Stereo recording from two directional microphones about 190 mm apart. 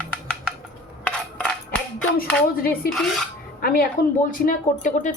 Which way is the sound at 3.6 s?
50° left (ahead or behind).